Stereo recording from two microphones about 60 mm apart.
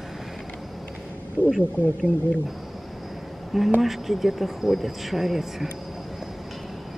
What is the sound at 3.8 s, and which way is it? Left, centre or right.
Speech, centre.